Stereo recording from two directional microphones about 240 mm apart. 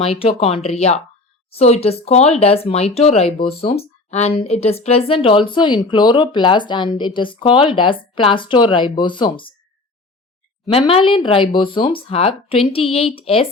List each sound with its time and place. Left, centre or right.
0.0 s speech: left
10.7 s speech: left